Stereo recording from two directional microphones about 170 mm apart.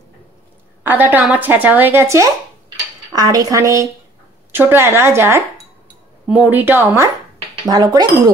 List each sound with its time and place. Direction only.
0.8 s speech: 10° right (ahead or behind)